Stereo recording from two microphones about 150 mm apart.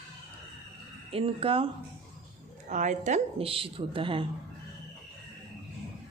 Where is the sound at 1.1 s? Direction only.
40° right (ahead or behind).